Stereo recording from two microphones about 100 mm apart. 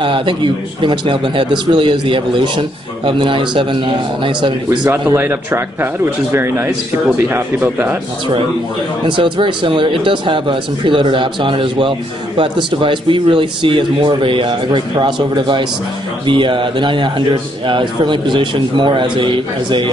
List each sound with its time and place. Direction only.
0.0 s speech: 60° right (ahead or behind)
5.1 s speech: 20° right (ahead or behind)
9.0 s a man's voice: 60° right (ahead or behind)